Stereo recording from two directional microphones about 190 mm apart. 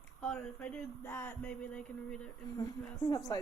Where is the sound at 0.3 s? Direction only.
10° left (ahead or behind).